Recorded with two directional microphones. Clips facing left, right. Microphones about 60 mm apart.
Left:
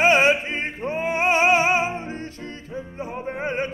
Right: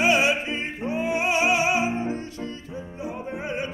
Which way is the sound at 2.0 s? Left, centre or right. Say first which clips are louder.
Right 3 dB; left.